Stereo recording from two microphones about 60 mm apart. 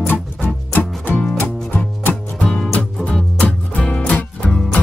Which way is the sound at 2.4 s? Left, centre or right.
Centre.